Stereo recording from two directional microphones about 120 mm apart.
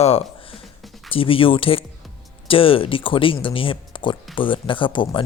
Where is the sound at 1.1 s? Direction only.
50° left (ahead or behind).